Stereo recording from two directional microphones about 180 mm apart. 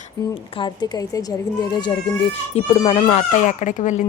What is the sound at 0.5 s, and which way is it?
A woman's voice, 25° left (ahead or behind).